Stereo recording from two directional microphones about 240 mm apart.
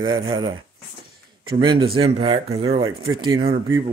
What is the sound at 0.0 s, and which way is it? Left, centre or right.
Speech, centre.